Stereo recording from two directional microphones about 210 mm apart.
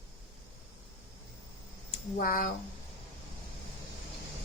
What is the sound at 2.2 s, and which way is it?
Speech, 40° left (ahead or behind).